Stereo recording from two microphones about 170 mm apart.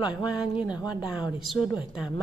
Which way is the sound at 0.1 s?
5° right (ahead or behind).